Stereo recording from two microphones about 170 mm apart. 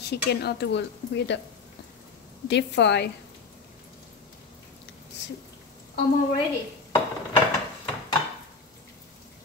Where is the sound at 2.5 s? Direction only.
90° left.